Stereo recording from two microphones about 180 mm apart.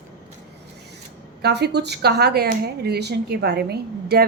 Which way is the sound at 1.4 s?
65° right (ahead or behind).